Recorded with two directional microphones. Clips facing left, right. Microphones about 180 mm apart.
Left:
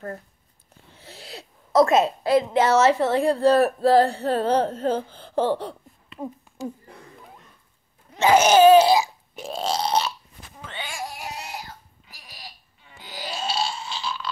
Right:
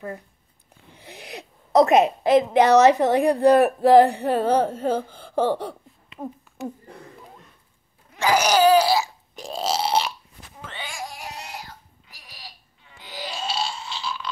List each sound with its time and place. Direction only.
0.9 s a woman's voice: 15° right (ahead or behind)
8.1 s laughter: 25° left (ahead or behind)
9.3 s a sound: centre (ahead or behind)